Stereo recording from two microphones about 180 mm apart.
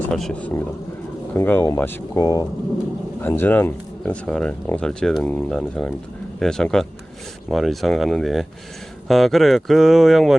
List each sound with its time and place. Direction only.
0.1 s speech: 5° left (ahead or behind)
1.4 s speech: 15° left (ahead or behind); by 10.3 s centre (ahead or behind)